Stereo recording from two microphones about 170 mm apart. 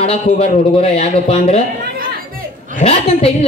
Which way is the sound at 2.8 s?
35° left (ahead or behind).